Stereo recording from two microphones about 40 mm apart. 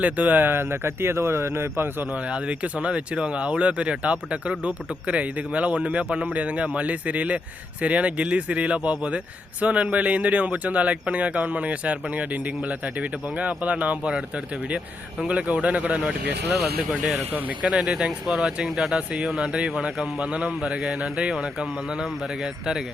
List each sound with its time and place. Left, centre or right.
0.0 s speech: right
0.4 s speech: right
2.3 s speech: right
15.3 s speech: right
17.7 s speech: centre